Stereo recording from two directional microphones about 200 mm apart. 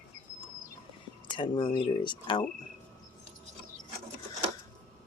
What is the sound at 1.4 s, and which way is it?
Speech, 25° left (ahead or behind).